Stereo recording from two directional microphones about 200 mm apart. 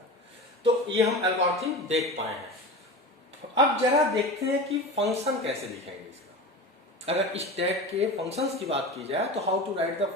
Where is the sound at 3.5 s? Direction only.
15° right (ahead or behind).